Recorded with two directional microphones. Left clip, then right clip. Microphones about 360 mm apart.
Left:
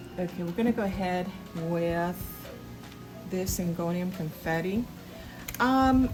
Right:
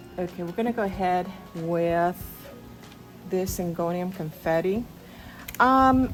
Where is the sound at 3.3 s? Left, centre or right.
Centre.